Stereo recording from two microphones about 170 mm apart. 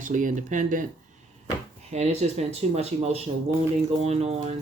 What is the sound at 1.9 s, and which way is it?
Speech, 40° right (ahead or behind).